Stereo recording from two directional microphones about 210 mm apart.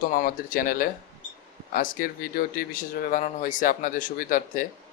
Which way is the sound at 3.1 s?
35° left (ahead or behind).